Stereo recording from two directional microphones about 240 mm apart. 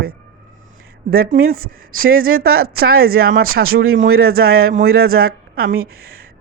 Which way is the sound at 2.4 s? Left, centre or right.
Right.